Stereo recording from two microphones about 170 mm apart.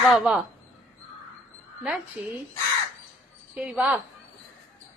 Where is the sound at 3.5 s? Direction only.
5° right (ahead or behind).